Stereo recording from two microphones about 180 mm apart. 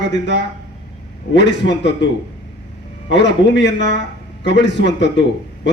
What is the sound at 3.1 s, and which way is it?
A man's voice, 80° left.